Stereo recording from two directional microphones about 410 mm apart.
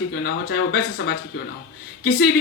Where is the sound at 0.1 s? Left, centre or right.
Left.